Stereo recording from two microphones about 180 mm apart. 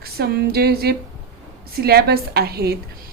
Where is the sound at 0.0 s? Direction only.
60° right (ahead or behind).